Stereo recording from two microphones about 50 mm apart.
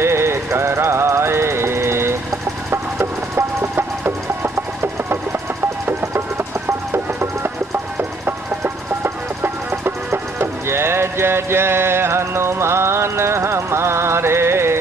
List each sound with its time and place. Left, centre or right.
0.0 s music: right
3.0 s a sound: right
6.9 s music: right